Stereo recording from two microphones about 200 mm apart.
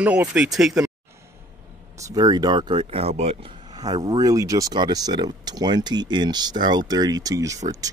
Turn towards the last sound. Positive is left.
turn(degrees=-15)  # may be behind; listen again after turning